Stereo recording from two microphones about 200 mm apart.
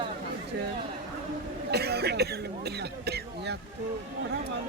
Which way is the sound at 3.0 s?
55° right (ahead or behind).